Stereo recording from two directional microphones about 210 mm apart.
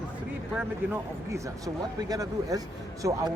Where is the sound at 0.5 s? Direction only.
10° right (ahead or behind).